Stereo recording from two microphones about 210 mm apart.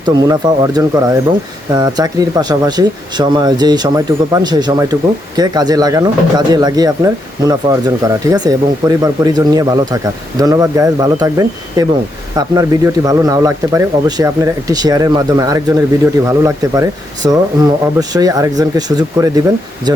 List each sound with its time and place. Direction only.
0.0 s speech: 20° right (ahead or behind)